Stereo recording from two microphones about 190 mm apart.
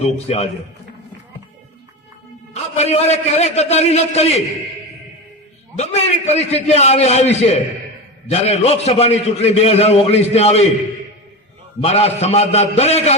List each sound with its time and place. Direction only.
0.0 s a man's voice: 35° left (ahead or behind)
2.5 s a man's voice: 35° left (ahead or behind)
5.7 s a man's voice: 35° left (ahead or behind)
11.8 s a man's voice: 30° left (ahead or behind)